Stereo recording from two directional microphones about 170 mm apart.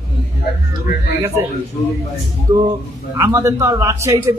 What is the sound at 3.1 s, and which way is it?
A man's voice, 15° right (ahead or behind).